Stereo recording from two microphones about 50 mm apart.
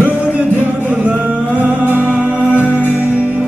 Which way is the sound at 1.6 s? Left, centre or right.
Right.